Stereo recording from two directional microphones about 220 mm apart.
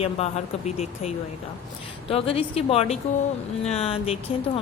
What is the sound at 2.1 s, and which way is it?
Speech, 25° left (ahead or behind).